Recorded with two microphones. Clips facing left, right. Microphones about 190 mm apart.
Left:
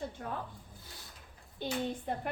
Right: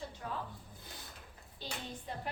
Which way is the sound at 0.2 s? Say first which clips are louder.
Even; 50° left (ahead or behind).